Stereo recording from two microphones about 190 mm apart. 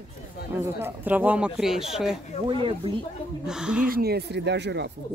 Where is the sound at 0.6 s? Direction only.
10° right (ahead or behind).